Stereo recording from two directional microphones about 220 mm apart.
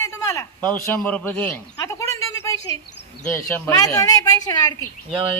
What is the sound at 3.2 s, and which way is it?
A woman's voice, 5° left (ahead or behind).